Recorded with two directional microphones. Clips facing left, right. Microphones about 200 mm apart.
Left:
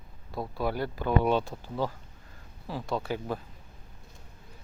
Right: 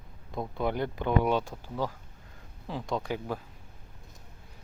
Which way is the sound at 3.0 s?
15° right (ahead or behind).